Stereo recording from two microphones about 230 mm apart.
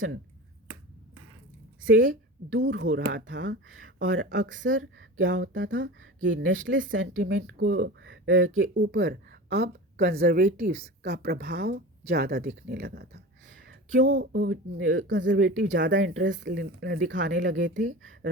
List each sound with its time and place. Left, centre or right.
1.8 s a woman's voice: right
2.0 s speech: right
2.6 s speech: right
13.7 s a sound: right
14.2 s speech: right